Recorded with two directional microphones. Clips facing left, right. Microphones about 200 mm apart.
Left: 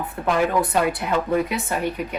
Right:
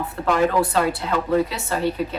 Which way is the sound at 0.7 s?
20° left (ahead or behind).